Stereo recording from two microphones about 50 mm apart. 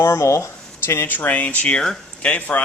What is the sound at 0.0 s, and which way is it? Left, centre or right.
Speech, left.